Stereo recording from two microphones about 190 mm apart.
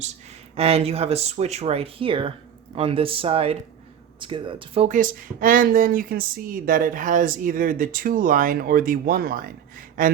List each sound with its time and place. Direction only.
0.0 s speech: 35° right (ahead or behind)